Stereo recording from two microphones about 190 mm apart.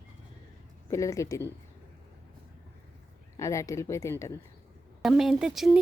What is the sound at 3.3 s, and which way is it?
Speech, 15° left (ahead or behind).